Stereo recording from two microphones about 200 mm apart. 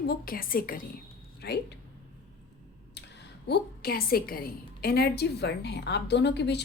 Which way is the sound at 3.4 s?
55° left (ahead or behind).